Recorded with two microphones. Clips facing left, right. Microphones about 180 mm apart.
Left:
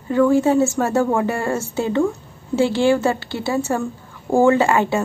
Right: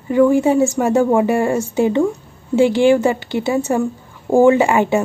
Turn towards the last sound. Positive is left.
turn(degrees=-15)  # may be behind; listen again after turning